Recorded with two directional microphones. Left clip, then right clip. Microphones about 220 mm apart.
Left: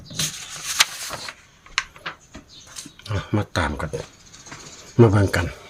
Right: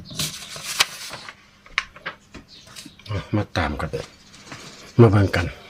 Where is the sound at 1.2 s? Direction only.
40° left (ahead or behind).